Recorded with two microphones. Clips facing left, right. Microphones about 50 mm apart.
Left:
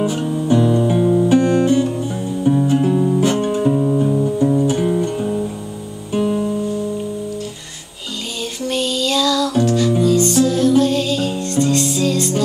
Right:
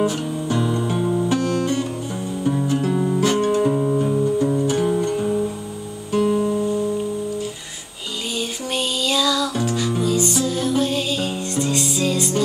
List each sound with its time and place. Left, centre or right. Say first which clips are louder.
0.0 s guitar: left 3 dB; centre
1.4 s music: left 7 dB; centre
3.6 s music: left 3 dB; centre
4.6 s music: left 3 dB; centre
8.6 s music: left 5 dB; centre